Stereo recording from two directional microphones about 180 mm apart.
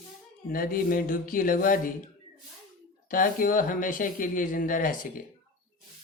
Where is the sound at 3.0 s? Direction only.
50° left (ahead or behind).